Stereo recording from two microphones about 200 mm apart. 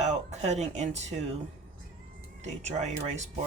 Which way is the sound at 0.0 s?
35° right (ahead or behind).